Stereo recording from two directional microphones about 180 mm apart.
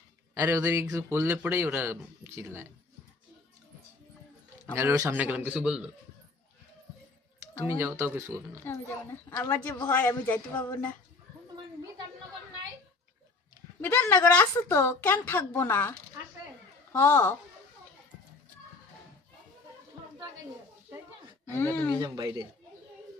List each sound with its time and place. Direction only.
0.3 s speech: 15° right (ahead or behind)
4.8 s speech: 15° right (ahead or behind)
7.8 s speech: 15° right (ahead or behind)
9.3 s a woman's voice: 10° left (ahead or behind)
13.8 s a woman's voice: 10° left (ahead or behind)
21.5 s a woman's voice: 10° left (ahead or behind)
22.0 s speech: 20° right (ahead or behind)